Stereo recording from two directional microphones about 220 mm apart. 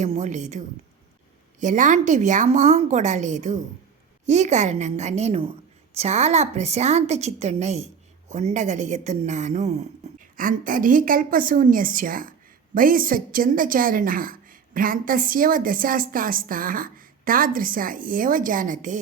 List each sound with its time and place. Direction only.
0.0 s a woman's voice: 30° right (ahead or behind)